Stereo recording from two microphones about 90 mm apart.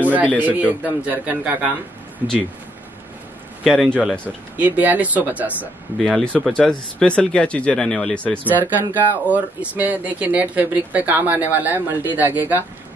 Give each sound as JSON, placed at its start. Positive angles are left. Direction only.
{"t": 0.0, "sound": "a sound", "side_deg": -15}
{"t": 0.4, "sound": "a man's voice", "side_deg": -20}
{"t": 3.6, "sound": "speech", "side_deg": 0}
{"t": 4.6, "sound": "a man's voice", "side_deg": -20}
{"t": 6.0, "sound": "speech", "side_deg": 5}
{"t": 8.9, "sound": "speech", "side_deg": -20}